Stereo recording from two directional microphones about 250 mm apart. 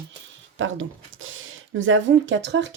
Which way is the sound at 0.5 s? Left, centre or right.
Right.